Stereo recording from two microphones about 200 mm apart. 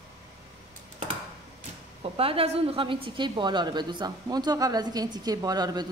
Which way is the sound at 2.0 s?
30° right (ahead or behind).